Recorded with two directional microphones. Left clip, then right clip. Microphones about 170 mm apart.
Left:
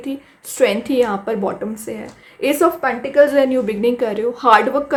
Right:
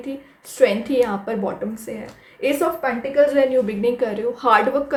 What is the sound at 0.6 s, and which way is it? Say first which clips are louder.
A woman's voice: left 1 dB; 35° left (ahead or behind).